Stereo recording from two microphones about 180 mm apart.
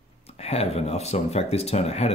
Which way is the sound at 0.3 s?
35° left (ahead or behind).